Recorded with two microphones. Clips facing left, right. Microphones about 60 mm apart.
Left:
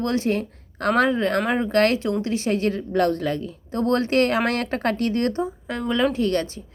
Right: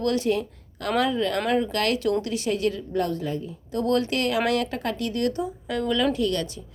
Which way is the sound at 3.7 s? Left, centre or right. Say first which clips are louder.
Left 3 dB; left.